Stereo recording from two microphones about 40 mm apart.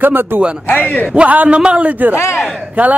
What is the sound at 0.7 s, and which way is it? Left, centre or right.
Speech, left.